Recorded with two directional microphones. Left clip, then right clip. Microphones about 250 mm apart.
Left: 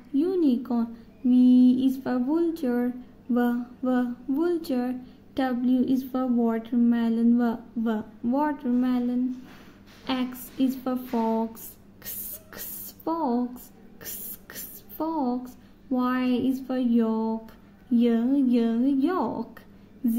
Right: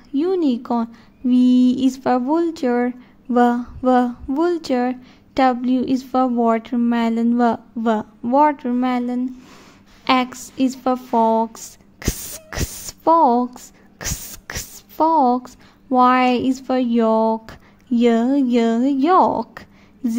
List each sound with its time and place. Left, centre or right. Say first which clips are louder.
0.1 s speech: right 5 dB; right
13.0 s speech: right 14 dB; right
14.5 s a sound: right 14 dB; right
15.9 s speech: right 13 dB; right